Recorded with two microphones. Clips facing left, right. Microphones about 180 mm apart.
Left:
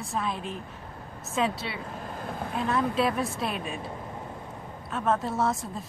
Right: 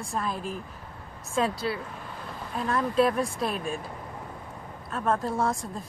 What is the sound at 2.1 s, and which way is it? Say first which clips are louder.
Boat: left 4 dB; 50° left (ahead or behind).